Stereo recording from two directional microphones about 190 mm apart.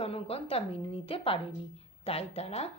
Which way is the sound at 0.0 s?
30° left (ahead or behind).